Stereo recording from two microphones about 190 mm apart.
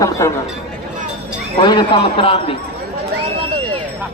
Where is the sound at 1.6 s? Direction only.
25° left (ahead or behind).